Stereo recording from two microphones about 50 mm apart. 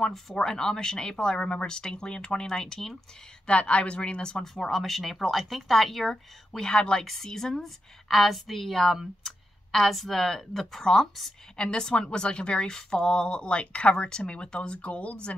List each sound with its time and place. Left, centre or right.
0.3 s speech: centre
3.4 s a woman's voice: left; by 6.7 s centre
6.7 s a woman's voice: centre